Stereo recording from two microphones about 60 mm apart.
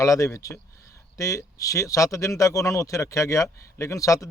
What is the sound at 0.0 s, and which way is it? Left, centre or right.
Speech, left.